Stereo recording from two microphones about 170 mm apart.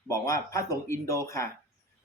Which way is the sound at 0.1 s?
20° left (ahead or behind).